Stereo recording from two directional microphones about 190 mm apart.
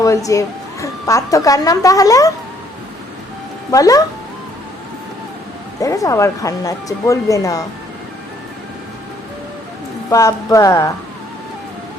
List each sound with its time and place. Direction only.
0.0 s speech: 15° left (ahead or behind)
3.7 s speech: 20° left (ahead or behind)
5.8 s speech: 15° left (ahead or behind)
10.1 s speech: 15° left (ahead or behind)